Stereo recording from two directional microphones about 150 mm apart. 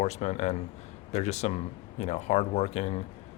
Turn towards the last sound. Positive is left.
turn(degrees=45)  # may be behind; listen again after turning